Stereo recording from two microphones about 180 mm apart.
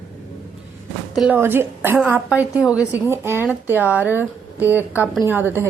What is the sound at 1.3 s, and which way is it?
Speech, 15° right (ahead or behind).